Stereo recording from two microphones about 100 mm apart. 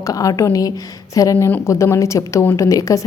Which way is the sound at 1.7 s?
30° left (ahead or behind).